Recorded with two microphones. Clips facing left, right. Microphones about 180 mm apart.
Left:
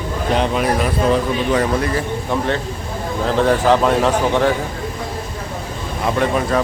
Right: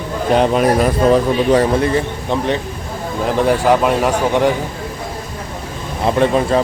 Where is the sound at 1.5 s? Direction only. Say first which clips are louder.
Right 4 dB; 25° right (ahead or behind).